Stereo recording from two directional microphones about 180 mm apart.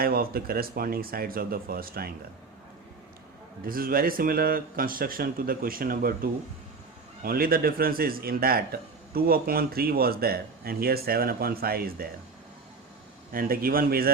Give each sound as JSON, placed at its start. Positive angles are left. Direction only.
{"t": 0.0, "sound": "a man's voice", "side_deg": -55}
{"t": 3.7, "sound": "speech", "side_deg": -55}
{"t": 7.2, "sound": "a man's voice", "side_deg": -55}
{"t": 13.3, "sound": "a man's voice", "side_deg": -55}